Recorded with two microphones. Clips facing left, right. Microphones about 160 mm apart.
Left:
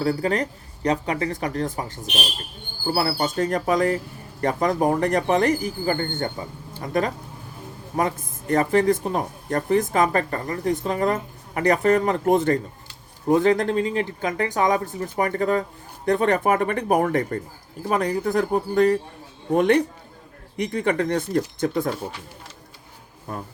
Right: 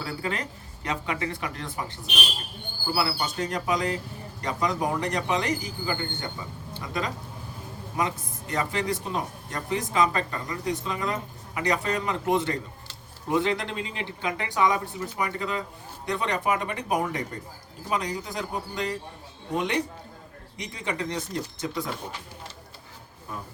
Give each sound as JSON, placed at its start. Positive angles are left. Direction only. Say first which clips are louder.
{"t": 0.0, "sound": "speech", "louder": "left 9 dB", "side_deg": 40}